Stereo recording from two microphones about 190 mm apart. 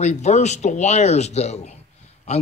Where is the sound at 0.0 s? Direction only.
40° left (ahead or behind).